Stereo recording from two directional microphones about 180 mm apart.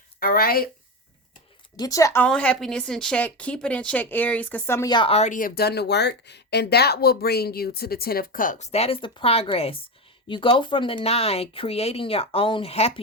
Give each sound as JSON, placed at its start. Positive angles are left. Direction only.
{"t": 0.2, "sound": "speech", "side_deg": 55}
{"t": 1.7, "sound": "speech", "side_deg": 20}
{"t": 2.2, "sound": "a woman's voice", "side_deg": 5}